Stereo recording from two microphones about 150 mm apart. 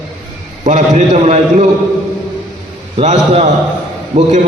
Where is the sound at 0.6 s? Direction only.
50° right (ahead or behind).